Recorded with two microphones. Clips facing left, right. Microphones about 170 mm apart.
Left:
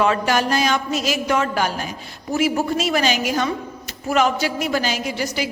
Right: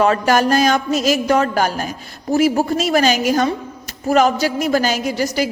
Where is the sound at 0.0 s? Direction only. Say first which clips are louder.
Right 4 dB; 40° right (ahead or behind).